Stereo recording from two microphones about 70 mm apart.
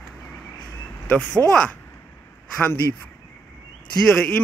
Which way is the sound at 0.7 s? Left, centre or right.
Left.